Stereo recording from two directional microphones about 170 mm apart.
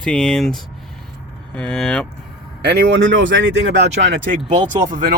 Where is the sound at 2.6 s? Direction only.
80° right.